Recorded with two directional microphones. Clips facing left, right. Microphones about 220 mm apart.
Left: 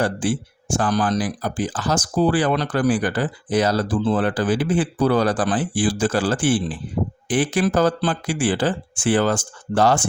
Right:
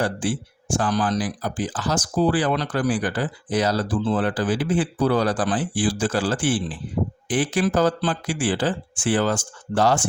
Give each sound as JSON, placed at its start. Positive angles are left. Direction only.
{"t": 0.0, "sound": "speech", "side_deg": 50}